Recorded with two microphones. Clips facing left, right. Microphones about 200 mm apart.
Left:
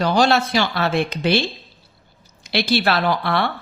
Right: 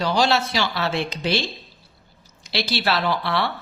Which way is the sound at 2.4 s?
55° left (ahead or behind).